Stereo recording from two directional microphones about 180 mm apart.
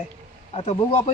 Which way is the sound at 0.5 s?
35° left (ahead or behind).